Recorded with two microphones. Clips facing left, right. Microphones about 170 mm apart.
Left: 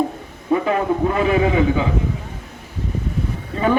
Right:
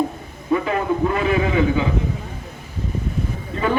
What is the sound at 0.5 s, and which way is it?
Speech, 40° left (ahead or behind).